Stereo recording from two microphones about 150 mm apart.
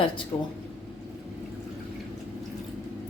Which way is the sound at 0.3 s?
25° left (ahead or behind).